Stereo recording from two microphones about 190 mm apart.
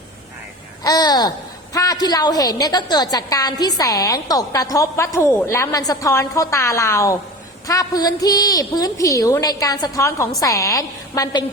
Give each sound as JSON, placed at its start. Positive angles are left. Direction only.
{"t": 0.9, "sound": "a woman's voice", "side_deg": 20}